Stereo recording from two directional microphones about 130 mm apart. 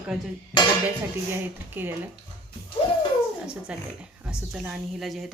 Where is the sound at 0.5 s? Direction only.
35° left (ahead or behind).